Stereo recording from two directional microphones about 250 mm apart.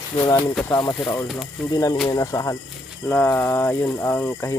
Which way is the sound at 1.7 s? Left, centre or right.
Centre.